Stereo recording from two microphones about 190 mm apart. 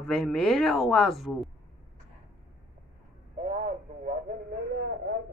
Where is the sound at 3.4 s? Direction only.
40° right (ahead or behind).